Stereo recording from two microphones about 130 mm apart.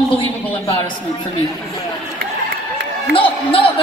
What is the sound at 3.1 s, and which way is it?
Speech, 45° left (ahead or behind).